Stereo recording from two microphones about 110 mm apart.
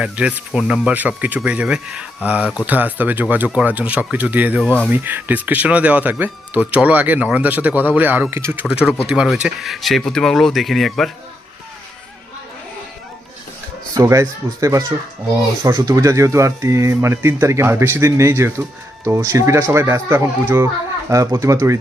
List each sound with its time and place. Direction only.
0.0 s speech: 10° right (ahead or behind)
9.0 s speech: 5° right (ahead or behind)
13.9 s speech: 30° right (ahead or behind)